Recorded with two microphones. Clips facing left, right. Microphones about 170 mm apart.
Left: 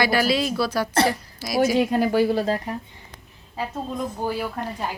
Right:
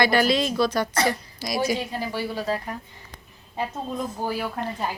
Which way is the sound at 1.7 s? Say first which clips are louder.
Left 10 dB; 60° left (ahead or behind).